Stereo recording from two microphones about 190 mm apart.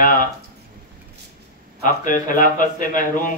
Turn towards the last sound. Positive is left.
turn(degrees=45)  # may be behind; listen again after turning